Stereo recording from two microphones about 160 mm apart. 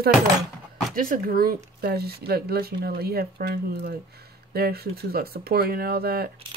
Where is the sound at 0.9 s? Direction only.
60° right (ahead or behind).